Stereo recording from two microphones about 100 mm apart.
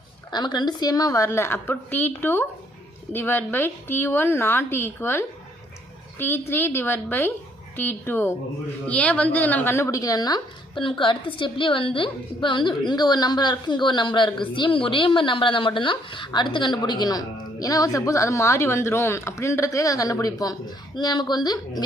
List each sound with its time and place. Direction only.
0.3 s a woman's voice: 45° left (ahead or behind)